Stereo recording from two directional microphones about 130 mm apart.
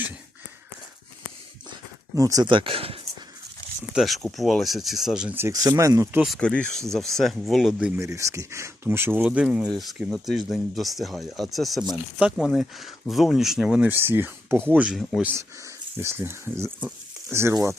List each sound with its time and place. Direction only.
2.1 s speech: 25° right (ahead or behind); by 3.0 s 45° right (ahead or behind)
3.9 s speech: centre (ahead or behind)
5.4 s speech: 25° right (ahead or behind)
6.2 s speech: 5° left (ahead or behind)
7.9 s speech: 25° right (ahead or behind)